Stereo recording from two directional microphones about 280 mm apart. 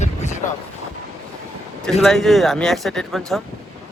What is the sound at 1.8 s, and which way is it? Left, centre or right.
Speech, centre.